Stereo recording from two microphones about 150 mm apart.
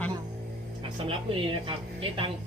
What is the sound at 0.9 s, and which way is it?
A woman's voice, 35° right (ahead or behind).